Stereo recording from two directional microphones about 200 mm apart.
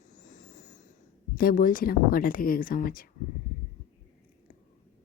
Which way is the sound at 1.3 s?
45° left (ahead or behind).